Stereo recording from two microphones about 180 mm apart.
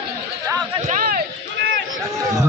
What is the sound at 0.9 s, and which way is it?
Run, 50° right (ahead or behind).